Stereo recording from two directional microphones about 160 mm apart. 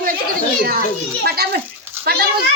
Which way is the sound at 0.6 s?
70° right (ahead or behind).